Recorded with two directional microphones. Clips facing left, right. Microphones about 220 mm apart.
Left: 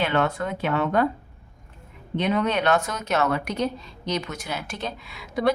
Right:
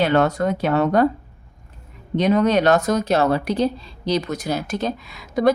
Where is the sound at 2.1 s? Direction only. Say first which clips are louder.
Right 6 dB; 40° right (ahead or behind).